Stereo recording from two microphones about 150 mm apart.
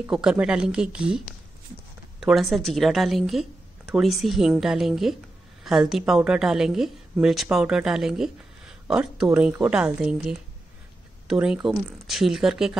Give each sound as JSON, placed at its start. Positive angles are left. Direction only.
{"t": 0.0, "sound": "a woman's voice", "side_deg": -5}